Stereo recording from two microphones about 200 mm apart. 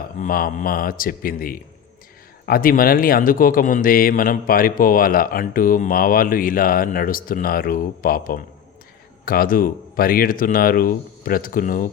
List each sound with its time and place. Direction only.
0.2 s speech: 45° left (ahead or behind)